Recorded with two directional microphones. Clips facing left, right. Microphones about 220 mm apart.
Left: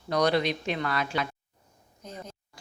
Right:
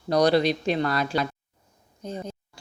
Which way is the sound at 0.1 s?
35° right (ahead or behind).